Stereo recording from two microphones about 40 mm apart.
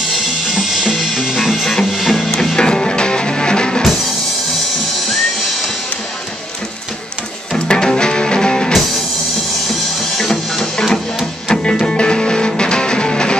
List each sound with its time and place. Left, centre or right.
0.1 s music: centre
1.6 s music: centre
1.9 s music: centre
2.5 s music: centre
7.5 s music: centre
9.7 s music: centre; by 13.4 s left